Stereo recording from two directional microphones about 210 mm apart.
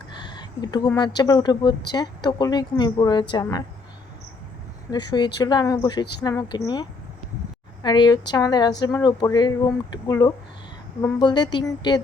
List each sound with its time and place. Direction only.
0.1 s a sound: 20° left (ahead or behind)
0.9 s speech: 20° left (ahead or behind)
4.9 s speech: 20° left (ahead or behind)